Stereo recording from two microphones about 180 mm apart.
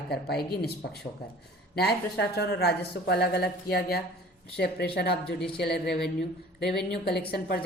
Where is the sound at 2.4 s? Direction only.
65° left (ahead or behind).